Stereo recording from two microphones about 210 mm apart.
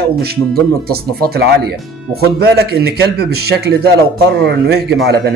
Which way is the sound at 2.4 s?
50° right (ahead or behind).